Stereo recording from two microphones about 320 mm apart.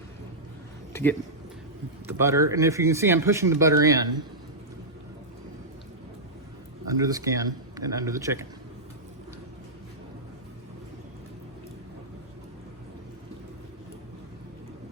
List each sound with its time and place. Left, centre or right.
2.0 s speech: centre
6.8 s speech: centre